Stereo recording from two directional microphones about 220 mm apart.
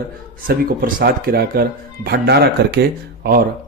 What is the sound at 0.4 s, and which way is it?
Speech, 40° right (ahead or behind).